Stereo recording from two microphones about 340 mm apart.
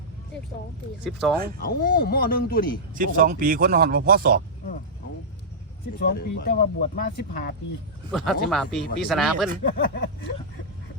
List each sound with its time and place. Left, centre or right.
1.2 s speech: centre
1.6 s speech: left
2.9 s speech: right
6.0 s speech: left
8.1 s speech: centre
9.6 s speech: left